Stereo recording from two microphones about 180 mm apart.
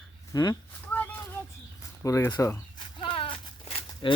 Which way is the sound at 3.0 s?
30° left (ahead or behind).